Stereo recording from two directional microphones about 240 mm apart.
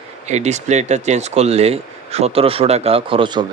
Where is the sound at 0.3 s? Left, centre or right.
Right.